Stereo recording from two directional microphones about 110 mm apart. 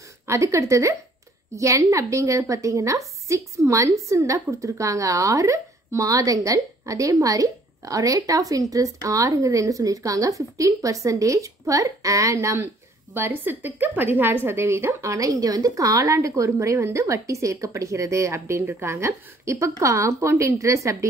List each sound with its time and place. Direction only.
0.3 s a woman's voice: 25° right (ahead or behind)